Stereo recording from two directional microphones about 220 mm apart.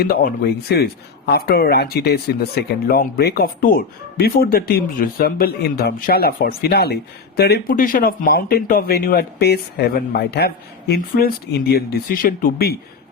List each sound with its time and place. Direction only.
0.0 s speech: 45° left (ahead or behind)